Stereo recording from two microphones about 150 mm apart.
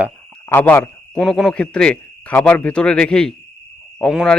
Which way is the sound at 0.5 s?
10° left (ahead or behind).